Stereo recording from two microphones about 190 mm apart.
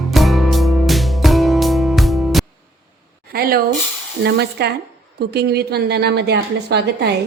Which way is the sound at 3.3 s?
50° right (ahead or behind).